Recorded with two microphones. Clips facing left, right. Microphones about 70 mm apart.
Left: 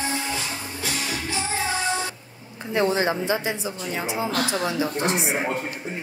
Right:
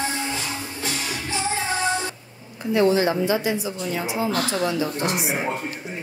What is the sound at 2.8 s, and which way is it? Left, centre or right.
Speech, left.